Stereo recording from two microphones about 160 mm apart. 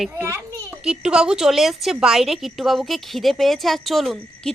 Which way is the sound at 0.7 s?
5° right (ahead or behind).